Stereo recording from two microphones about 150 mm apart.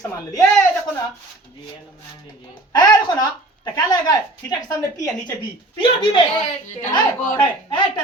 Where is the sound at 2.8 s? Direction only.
25° left (ahead or behind).